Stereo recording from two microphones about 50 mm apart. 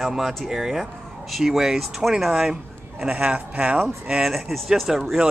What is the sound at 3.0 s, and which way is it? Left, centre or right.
Speech, right.